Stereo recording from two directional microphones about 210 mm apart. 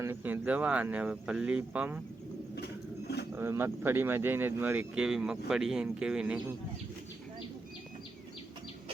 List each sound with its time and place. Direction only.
0.0 s speech: 10° right (ahead or behind)
3.3 s speech: 10° right (ahead or behind)